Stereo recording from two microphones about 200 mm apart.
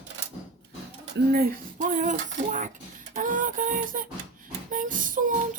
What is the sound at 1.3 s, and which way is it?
Speech, 45° right (ahead or behind).